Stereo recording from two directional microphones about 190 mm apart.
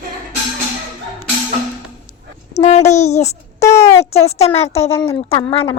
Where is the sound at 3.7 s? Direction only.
15° left (ahead or behind).